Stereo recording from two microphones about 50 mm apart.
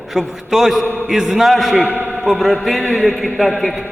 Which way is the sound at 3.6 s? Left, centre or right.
Centre.